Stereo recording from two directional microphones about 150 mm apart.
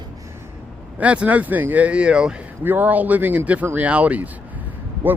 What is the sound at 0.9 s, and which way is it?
Speech, 10° right (ahead or behind).